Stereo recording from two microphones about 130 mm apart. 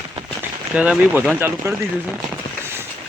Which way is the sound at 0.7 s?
10° right (ahead or behind).